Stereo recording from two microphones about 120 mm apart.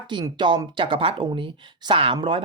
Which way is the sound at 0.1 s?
40° right (ahead or behind).